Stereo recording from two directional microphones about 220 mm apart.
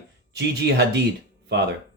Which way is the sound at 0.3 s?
50° right (ahead or behind).